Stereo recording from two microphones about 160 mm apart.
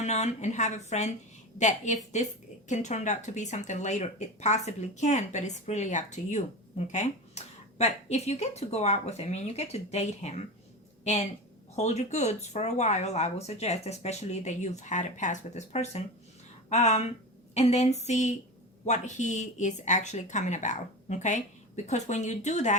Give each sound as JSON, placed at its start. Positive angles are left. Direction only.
{"t": 0.0, "sound": "a woman's voice", "side_deg": 45}
{"t": 11.8, "sound": "a woman's voice", "side_deg": 45}